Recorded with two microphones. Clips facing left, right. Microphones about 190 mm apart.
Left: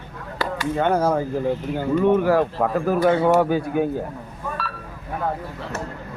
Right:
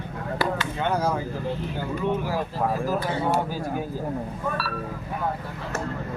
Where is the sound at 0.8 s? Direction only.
55° left (ahead or behind).